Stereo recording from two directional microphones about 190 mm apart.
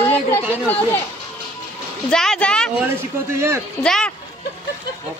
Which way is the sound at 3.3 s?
15° right (ahead or behind).